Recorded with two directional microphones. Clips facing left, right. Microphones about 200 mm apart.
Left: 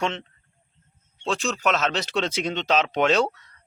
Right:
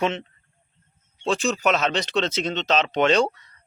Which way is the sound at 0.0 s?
5° right (ahead or behind).